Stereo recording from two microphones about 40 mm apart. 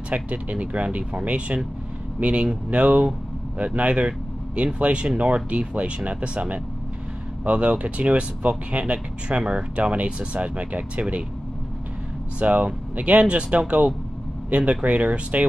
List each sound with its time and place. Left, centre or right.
0.1 s speech: right
12.4 s speech: right